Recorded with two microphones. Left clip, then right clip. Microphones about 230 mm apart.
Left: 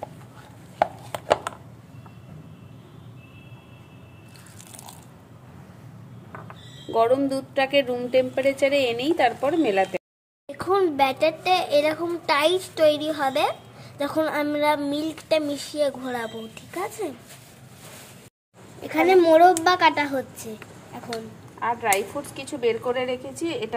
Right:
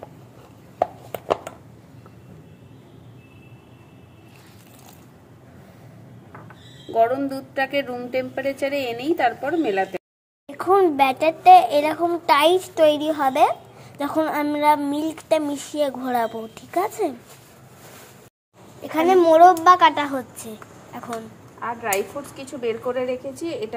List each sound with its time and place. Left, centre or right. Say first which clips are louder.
6.9 s a woman's voice: right 1 dB; left
10.4 s a child's voice: right 5 dB; centre
18.9 s a child's voice: right 1 dB; centre
22.4 s a woman's voice: left 2 dB; left